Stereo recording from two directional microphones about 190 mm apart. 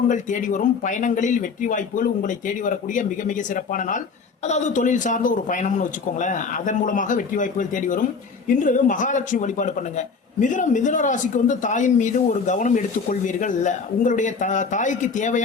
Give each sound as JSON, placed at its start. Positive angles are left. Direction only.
{"t": 0.1, "sound": "a man's voice", "side_deg": 40}